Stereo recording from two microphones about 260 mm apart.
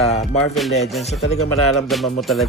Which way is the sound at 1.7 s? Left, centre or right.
Centre.